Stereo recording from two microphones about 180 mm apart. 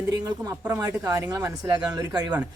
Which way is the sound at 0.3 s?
20° right (ahead or behind).